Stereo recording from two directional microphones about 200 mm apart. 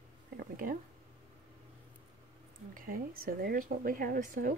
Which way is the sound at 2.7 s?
45° right (ahead or behind).